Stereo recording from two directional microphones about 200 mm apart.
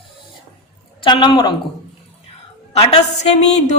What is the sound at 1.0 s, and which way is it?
Speech, 25° left (ahead or behind).